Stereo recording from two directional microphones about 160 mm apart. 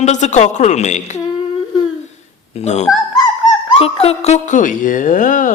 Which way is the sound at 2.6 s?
45° left (ahead or behind).